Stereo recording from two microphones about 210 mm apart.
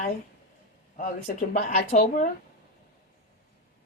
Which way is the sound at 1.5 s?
30° left (ahead or behind).